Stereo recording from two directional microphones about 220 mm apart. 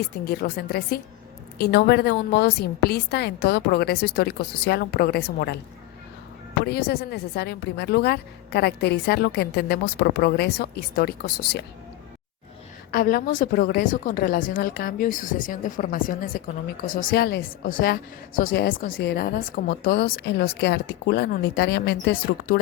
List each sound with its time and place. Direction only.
0.3 s a woman's voice: 45° left (ahead or behind)
6.7 s a woman's voice: 45° left (ahead or behind)
12.9 s a woman's voice: 40° left (ahead or behind)